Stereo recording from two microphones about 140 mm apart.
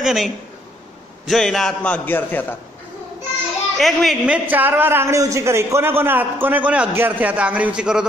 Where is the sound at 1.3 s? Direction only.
Centre (ahead or behind).